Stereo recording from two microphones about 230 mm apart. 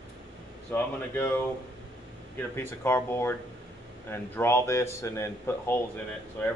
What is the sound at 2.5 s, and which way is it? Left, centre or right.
Speech, centre.